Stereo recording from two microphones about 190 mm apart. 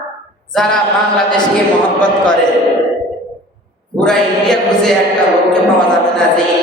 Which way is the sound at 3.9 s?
5° left (ahead or behind).